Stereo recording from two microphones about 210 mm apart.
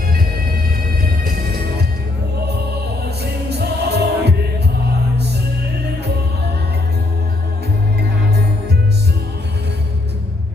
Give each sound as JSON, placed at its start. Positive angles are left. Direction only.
{"t": 3.5, "sound": "music", "side_deg": -50}